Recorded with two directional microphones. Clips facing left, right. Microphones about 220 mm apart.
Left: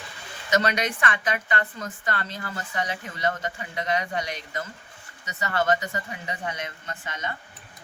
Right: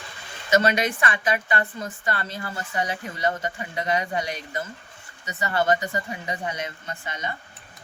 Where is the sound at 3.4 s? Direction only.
30° right (ahead or behind).